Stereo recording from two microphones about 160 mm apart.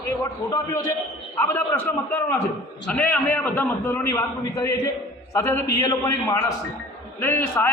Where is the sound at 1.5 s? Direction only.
15° left (ahead or behind).